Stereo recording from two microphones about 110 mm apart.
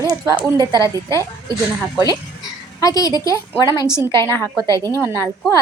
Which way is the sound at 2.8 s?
35° left (ahead or behind).